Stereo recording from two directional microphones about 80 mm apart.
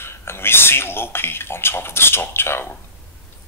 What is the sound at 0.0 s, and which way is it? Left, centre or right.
Speech, left.